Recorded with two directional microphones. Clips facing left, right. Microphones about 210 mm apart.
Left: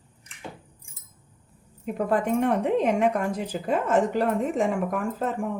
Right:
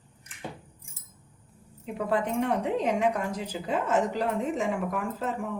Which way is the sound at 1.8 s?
50° left (ahead or behind).